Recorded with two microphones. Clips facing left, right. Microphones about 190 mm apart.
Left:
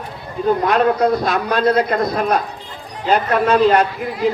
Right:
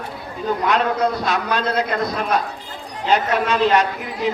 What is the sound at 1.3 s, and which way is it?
A man's voice, 55° left (ahead or behind).